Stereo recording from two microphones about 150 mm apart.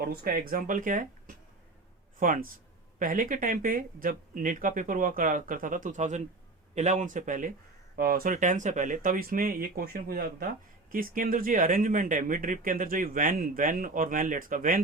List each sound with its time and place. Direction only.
0.0 s speech: 75° right (ahead or behind); by 7.5 s 60° right (ahead or behind)
7.9 s speech: 80° right
10.9 s speech: 65° right (ahead or behind)